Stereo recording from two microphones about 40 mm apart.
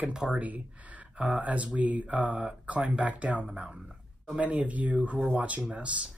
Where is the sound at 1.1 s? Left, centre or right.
Right.